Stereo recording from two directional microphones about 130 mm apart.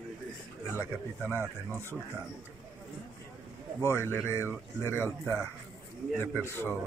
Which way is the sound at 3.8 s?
20° left (ahead or behind).